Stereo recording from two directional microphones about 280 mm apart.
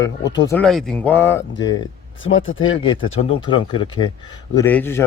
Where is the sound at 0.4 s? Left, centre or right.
Centre.